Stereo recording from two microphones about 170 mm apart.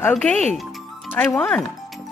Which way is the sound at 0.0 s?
5° left (ahead or behind).